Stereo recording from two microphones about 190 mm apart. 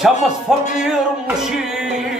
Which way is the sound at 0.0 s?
5° right (ahead or behind).